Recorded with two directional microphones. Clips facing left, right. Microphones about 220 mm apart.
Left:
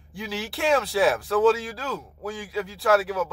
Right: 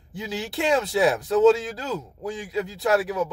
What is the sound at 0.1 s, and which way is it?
Speech, 20° right (ahead or behind).